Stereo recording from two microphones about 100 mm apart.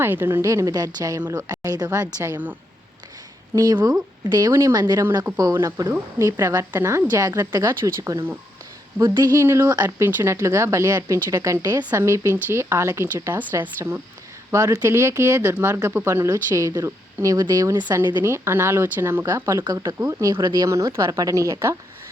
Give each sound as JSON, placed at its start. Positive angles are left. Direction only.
{"t": 0.0, "sound": "speech", "side_deg": -25}
{"t": 2.2, "sound": "speech", "side_deg": -20}
{"t": 3.5, "sound": "speech", "side_deg": -35}
{"t": 9.0, "sound": "speech", "side_deg": -45}
{"t": 9.4, "sound": "speech", "side_deg": -30}
{"t": 14.5, "sound": "speech", "side_deg": -35}
{"t": 17.9, "sound": "speech", "side_deg": -25}
{"t": 20.4, "sound": "speech", "side_deg": -40}